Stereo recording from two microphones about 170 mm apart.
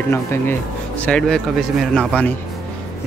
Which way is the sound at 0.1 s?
15° left (ahead or behind).